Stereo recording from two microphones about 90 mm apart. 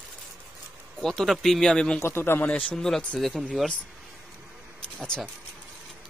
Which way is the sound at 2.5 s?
10° left (ahead or behind).